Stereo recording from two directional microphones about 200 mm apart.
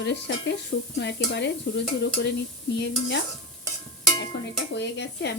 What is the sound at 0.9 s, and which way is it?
Stir, 60° left (ahead or behind).